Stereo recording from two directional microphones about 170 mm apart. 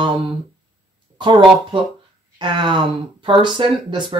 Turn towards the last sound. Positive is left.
turn(degrees=-30)  # may be behind; listen again after turning